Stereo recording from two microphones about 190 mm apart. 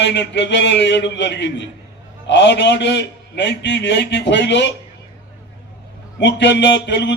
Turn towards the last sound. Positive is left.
turn(degrees=65)  # may be behind; listen again after turning